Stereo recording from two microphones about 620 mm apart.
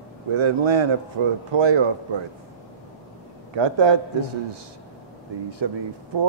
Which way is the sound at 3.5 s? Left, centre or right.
Right.